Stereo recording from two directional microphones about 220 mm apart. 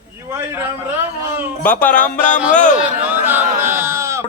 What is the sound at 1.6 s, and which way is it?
Speech, 5° left (ahead or behind).